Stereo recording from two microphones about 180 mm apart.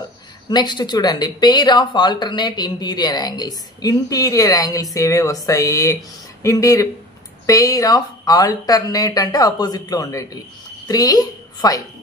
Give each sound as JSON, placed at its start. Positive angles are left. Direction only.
{"t": 0.5, "sound": "a woman's voice", "side_deg": 25}